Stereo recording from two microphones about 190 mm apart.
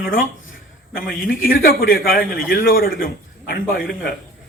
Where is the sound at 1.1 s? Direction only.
90° left.